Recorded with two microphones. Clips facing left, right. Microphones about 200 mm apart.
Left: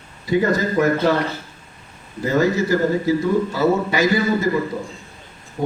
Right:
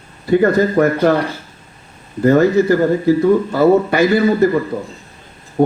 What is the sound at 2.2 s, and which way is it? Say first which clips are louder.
Speech: right 7 dB; 55° right (ahead or behind).